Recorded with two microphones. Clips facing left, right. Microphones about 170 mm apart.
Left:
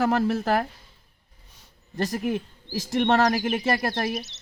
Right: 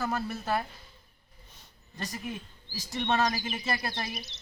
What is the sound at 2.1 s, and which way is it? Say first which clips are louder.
Speech: left 9 dB; 60° left (ahead or behind).